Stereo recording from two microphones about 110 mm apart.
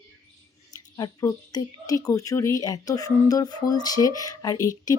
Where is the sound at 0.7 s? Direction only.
40° left (ahead or behind).